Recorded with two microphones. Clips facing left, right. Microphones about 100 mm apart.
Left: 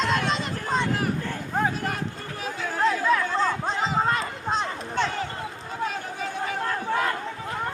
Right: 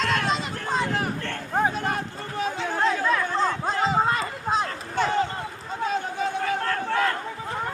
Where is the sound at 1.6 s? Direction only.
25° right (ahead or behind).